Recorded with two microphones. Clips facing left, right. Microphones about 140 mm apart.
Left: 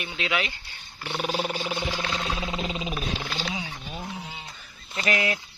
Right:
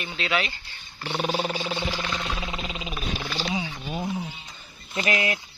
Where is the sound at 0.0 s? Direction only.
15° left (ahead or behind).